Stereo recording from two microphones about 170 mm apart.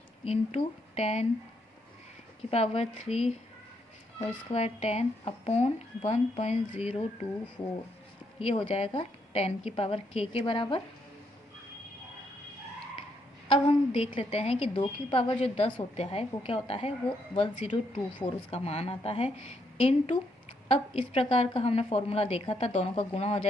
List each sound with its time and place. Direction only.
0.3 s speech: 35° left (ahead or behind)
2.5 s speech: 40° left (ahead or behind)
4.5 s speech: 35° left (ahead or behind)
8.4 s speech: 35° left (ahead or behind)
13.5 s a sound: 35° left (ahead or behind)
14.2 s speech: 35° left (ahead or behind)